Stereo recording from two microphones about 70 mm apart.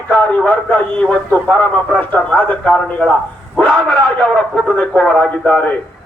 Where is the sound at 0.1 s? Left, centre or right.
Centre.